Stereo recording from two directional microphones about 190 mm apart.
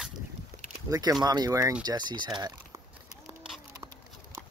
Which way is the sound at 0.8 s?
20° right (ahead or behind).